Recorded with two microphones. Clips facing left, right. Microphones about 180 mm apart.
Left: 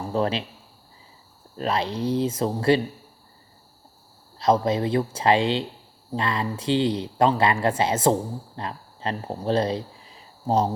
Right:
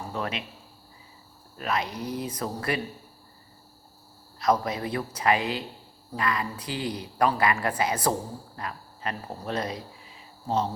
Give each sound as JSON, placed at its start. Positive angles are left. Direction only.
{"t": 0.1, "sound": "speech", "side_deg": 30}
{"t": 1.5, "sound": "speech", "side_deg": 30}
{"t": 4.4, "sound": "speech", "side_deg": 25}